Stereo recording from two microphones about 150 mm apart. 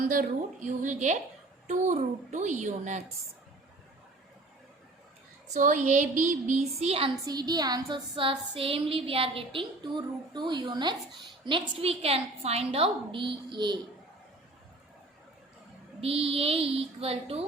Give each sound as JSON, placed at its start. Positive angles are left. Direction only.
{"t": 0.1, "sound": "a woman's voice", "side_deg": -60}
{"t": 5.5, "sound": "speech", "side_deg": -60}
{"t": 7.3, "sound": "a woman's voice", "side_deg": -25}
{"t": 16.0, "sound": "a woman's voice", "side_deg": -40}